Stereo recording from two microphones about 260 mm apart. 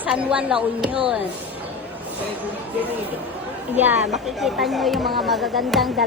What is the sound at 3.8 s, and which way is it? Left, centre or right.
A woman's voice, centre.